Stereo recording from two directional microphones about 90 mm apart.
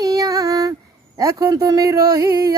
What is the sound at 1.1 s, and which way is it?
A man's voice, 40° right (ahead or behind).